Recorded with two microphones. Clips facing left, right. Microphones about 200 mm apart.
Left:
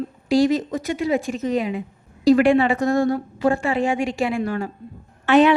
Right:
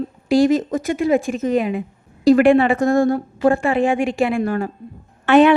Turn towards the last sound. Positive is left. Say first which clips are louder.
# right 3 dB
turn(degrees=-55)  # may be behind; listen again after turning